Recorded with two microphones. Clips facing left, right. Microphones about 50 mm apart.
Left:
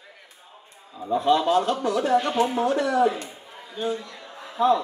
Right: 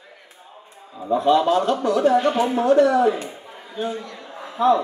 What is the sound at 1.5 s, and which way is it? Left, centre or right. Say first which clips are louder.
Speech: right 3 dB; centre.